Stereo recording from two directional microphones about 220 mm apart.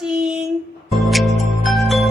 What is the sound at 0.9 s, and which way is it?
Music, centre (ahead or behind).